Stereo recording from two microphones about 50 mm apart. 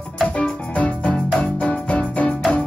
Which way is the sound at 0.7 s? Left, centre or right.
Left.